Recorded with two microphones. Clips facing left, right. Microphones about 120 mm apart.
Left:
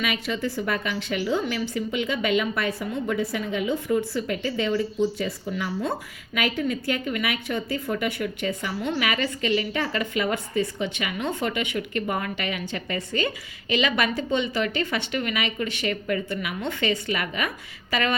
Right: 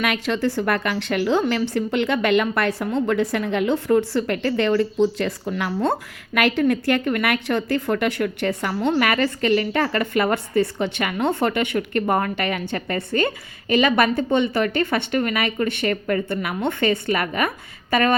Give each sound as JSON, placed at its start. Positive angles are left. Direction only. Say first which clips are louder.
{"t": 0.0, "sound": "a woman's voice", "louder": "right 5 dB", "side_deg": -70}
{"t": 8.9, "sound": "a woman's voice", "louder": "right 6 dB", "side_deg": -55}